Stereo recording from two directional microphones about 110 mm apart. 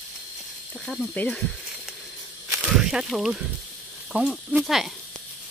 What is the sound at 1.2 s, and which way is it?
Speech, 15° left (ahead or behind).